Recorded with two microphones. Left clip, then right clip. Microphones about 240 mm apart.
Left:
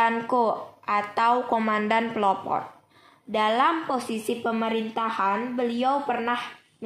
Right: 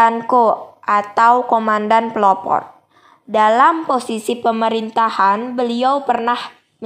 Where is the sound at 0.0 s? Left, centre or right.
Centre.